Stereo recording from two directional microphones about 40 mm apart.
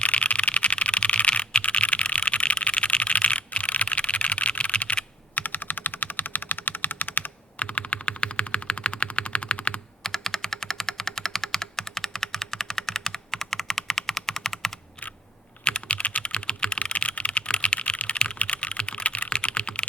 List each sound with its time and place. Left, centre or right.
0.0 s typing: left
5.3 s typing: left
7.6 s typing: left
10.0 s typing: centre
15.6 s computer keyboard: left
16.2 s typing: left